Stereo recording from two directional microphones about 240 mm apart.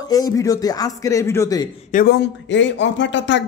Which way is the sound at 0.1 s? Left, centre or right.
Centre.